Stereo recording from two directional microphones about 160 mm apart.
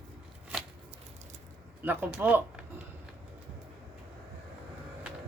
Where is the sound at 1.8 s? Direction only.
10° right (ahead or behind).